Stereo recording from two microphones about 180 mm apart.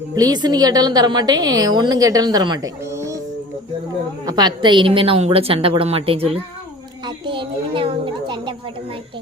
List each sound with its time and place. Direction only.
0.2 s a woman's voice: 20° right (ahead or behind)
4.3 s a woman's voice: 25° right (ahead or behind)
7.0 s a sound: 30° right (ahead or behind)